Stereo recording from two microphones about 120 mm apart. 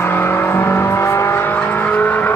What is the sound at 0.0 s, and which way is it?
Vehicle, 15° left (ahead or behind).